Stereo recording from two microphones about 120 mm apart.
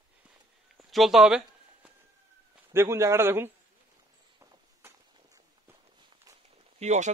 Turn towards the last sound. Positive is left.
turn(degrees=-70)  # may be behind; listen again after turning